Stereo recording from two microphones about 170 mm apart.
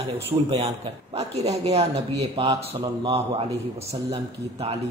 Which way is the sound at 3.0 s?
35° right (ahead or behind).